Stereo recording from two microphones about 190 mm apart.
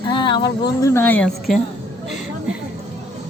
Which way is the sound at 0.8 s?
10° left (ahead or behind).